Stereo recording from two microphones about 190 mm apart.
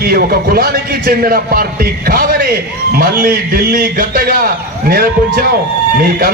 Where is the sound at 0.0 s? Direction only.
50° right (ahead or behind).